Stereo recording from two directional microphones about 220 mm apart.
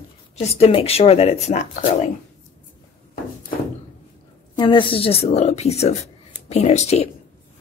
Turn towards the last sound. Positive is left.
turn(degrees=30)  # may be behind; listen again after turning